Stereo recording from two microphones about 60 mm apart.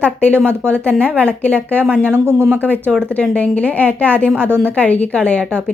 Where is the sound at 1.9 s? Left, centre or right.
Centre.